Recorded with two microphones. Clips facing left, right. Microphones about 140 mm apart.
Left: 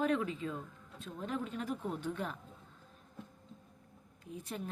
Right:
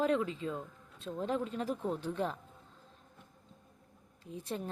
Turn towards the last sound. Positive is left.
turn(degrees=-30)  # may be behind; listen again after turning